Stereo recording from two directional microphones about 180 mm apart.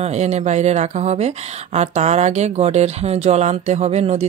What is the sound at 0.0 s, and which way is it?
Speech, 40° right (ahead or behind).